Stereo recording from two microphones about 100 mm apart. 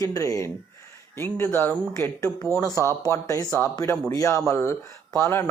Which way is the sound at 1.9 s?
30° left (ahead or behind).